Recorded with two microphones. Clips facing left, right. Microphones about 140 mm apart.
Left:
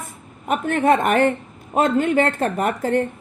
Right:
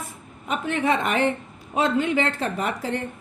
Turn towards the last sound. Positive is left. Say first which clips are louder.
# left 7 dB
turn(degrees=50)  # may be behind; listen again after turning